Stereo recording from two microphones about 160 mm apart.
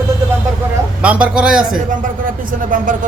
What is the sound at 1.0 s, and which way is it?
Speech, 10° right (ahead or behind).